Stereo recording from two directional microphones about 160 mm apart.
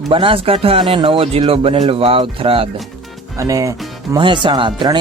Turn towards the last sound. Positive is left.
turn(degrees=-30)  # may be behind; listen again after turning